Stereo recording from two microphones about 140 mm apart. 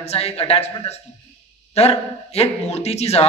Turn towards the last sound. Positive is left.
turn(degrees=50)  # may be behind; listen again after turning